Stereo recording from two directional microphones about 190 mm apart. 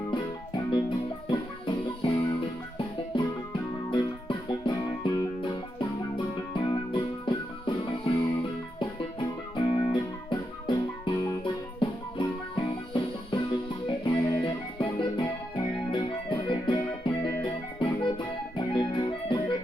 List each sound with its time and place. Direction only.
0.1 s music: 25° left (ahead or behind)